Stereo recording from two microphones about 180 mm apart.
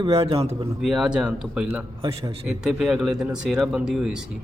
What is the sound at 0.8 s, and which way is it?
Speech, centre (ahead or behind).